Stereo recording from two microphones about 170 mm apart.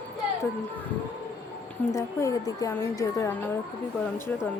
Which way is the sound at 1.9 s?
15° left (ahead or behind).